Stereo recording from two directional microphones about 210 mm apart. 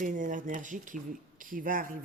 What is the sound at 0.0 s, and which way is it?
Speech, 40° right (ahead or behind).